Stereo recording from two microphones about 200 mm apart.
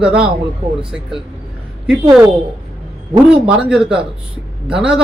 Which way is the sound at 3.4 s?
5° right (ahead or behind).